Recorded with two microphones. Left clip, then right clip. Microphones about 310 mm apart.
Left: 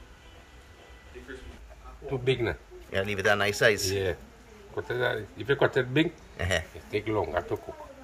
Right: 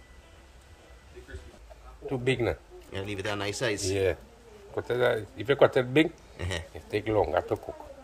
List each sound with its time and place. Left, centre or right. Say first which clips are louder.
2.0 s speech: even; right
2.9 s speech: left 8 dB; centre
3.9 s speech: right 2 dB; right
6.3 s speech: left 7 dB; centre
6.9 s speech: right 3 dB; right